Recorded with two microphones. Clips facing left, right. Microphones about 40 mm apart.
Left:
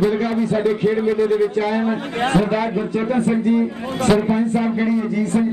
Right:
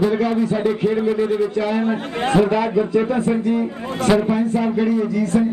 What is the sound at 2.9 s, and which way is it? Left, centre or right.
Speech, left.